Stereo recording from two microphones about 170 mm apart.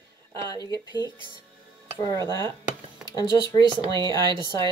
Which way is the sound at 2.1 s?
20° left (ahead or behind).